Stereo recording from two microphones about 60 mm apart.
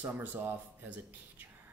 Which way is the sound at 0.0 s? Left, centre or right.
Right.